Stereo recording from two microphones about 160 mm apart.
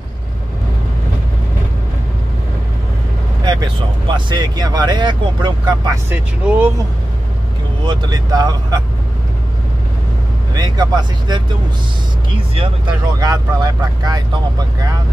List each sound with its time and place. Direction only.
3.4 s speech: 30° right (ahead or behind)
6.0 s speech: 10° right (ahead or behind)
7.8 s speech: 25° right (ahead or behind)
10.5 s speech: 25° right (ahead or behind)
12.5 s speech: 30° right (ahead or behind)